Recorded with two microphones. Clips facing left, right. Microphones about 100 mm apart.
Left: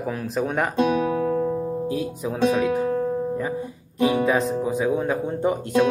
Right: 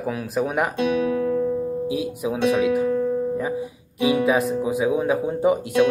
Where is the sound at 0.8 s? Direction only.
35° left (ahead or behind).